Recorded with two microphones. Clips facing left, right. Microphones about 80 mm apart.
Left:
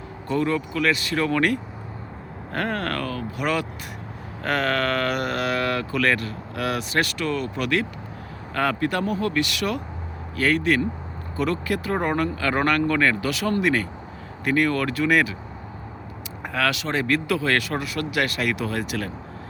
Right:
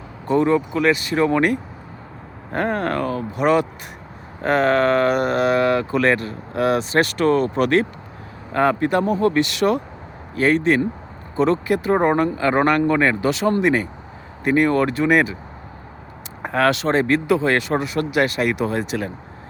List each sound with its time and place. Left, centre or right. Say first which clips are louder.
0.3 s speech: right 6 dB; right
16.4 s speech: right 6 dB; right